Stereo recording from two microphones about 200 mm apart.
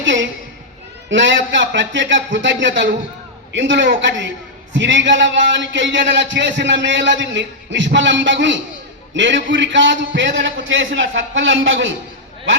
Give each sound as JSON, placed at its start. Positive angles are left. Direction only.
{"t": 0.0, "sound": "a woman's voice", "side_deg": -65}